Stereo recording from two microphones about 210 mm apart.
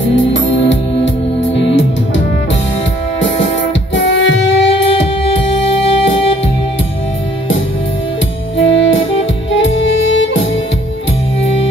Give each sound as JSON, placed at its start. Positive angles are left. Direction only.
{"t": 0.0, "sound": "music", "side_deg": 60}
{"t": 3.9, "sound": "music", "side_deg": 65}
{"t": 8.5, "sound": "saxophone", "side_deg": 65}
{"t": 9.5, "sound": "music", "side_deg": 65}